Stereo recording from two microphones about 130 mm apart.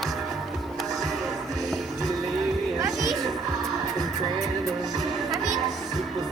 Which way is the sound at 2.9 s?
Centre (ahead or behind).